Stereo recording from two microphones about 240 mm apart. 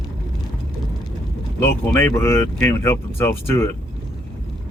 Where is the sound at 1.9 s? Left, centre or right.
Centre.